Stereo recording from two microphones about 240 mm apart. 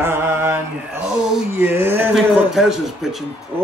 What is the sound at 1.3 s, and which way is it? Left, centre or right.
A man's voice, centre.